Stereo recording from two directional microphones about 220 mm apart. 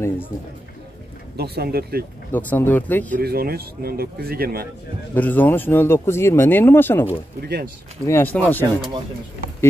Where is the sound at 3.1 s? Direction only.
45° right (ahead or behind).